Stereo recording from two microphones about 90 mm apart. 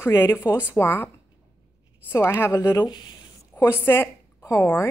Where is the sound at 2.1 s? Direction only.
30° left (ahead or behind).